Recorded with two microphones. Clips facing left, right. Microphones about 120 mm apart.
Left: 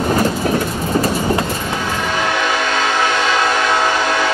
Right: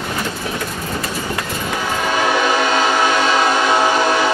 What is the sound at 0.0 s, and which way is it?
Train, 40° left (ahead or behind).